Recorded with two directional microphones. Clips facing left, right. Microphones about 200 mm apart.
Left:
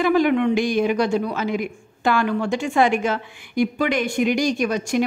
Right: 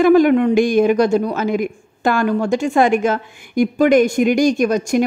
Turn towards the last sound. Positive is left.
turn(degrees=-45)  # may be behind; listen again after turning